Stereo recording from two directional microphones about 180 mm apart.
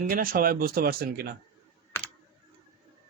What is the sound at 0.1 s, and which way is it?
Speech, 50° right (ahead or behind).